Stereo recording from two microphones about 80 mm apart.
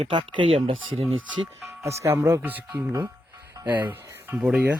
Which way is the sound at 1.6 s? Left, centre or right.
Right.